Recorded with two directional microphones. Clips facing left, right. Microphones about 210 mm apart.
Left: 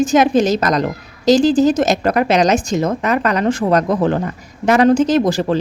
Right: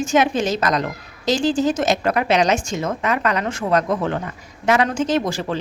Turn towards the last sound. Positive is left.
turn(degrees=35)  # may be behind; listen again after turning